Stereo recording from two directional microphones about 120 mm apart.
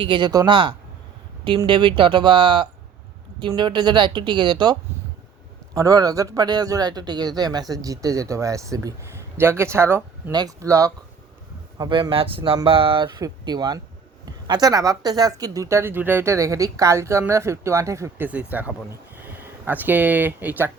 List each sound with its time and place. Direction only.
0.0 s a woman's voice: 40° right (ahead or behind)
5.7 s a man's voice: 30° right (ahead or behind)
11.8 s a woman's voice: 40° right (ahead or behind); by 18.3 s 25° right (ahead or behind)
18.3 s speech: 10° right (ahead or behind)